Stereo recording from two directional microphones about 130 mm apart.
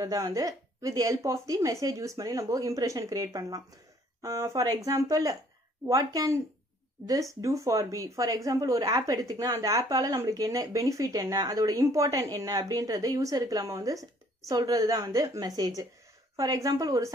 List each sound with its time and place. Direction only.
0.0 s speech: 25° right (ahead or behind)